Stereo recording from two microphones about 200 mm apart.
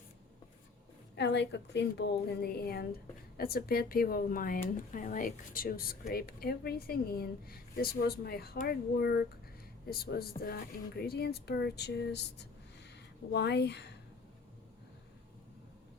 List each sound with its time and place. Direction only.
1.1 s a woman's voice: 60° left (ahead or behind)